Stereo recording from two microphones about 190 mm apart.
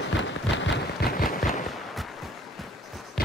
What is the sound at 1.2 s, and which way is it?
Fireworks, 50° left (ahead or behind).